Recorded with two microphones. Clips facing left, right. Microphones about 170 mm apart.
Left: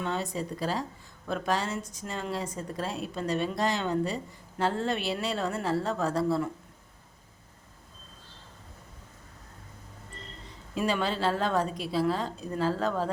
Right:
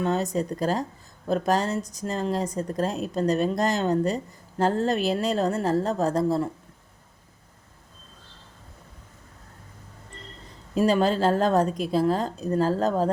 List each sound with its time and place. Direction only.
0.0 s a woman's voice: 40° right (ahead or behind)
10.8 s a woman's voice: 40° right (ahead or behind)